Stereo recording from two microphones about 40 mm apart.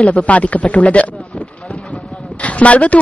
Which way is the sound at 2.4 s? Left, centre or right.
Left.